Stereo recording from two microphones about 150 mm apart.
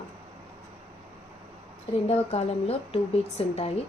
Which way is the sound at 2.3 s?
40° left (ahead or behind).